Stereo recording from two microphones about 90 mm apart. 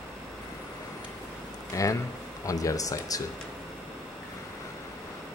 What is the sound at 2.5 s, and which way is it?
Speech, 40° left (ahead or behind).